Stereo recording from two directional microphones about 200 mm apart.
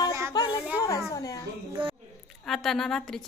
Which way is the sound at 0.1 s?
15° right (ahead or behind).